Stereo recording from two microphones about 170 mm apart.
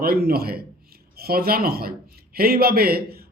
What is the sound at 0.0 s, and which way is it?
A man's voice, 65° right (ahead or behind).